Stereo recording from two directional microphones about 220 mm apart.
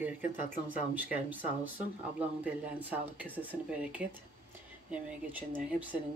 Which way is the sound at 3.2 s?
5° right (ahead or behind).